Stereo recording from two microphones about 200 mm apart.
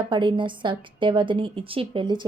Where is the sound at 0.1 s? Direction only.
25° right (ahead or behind).